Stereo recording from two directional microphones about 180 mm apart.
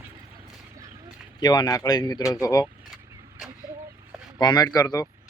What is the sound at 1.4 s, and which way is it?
Speech, 20° left (ahead or behind).